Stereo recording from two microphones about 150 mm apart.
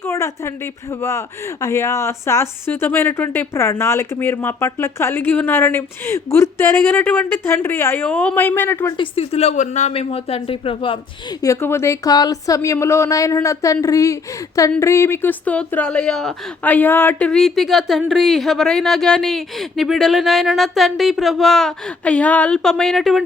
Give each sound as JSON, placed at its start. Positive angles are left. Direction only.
{"t": 0.0, "sound": "speech", "side_deg": 15}
{"t": 9.0, "sound": "speech", "side_deg": 40}
{"t": 11.4, "sound": "speech", "side_deg": 15}